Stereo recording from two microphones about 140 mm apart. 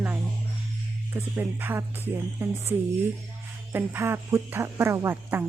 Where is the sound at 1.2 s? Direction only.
15° right (ahead or behind).